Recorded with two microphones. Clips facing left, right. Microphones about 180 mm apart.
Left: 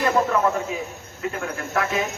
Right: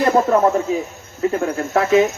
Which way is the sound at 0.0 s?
35° right (ahead or behind).